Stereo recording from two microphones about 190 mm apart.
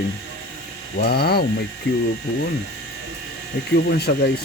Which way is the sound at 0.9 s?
55° left (ahead or behind).